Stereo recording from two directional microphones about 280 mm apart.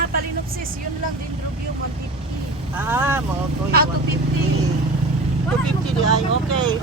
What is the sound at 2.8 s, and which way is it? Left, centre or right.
Speech, centre.